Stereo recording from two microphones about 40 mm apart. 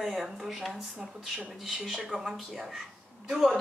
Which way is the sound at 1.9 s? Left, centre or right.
Centre.